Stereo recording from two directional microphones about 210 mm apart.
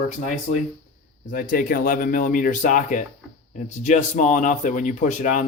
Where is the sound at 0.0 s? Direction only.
35° left (ahead or behind).